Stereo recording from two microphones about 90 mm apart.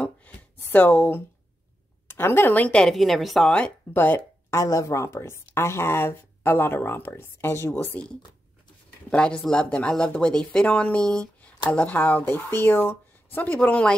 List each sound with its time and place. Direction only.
0.6 s speech: 20° left (ahead or behind); by 3.5 s centre (ahead or behind)
3.5 s speech: 15° left (ahead or behind)
4.5 s speech: 35° left (ahead or behind)
9.1 s speech: 10° left (ahead or behind)